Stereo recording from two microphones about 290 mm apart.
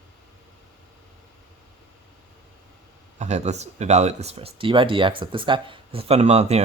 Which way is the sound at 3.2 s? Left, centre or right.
Right.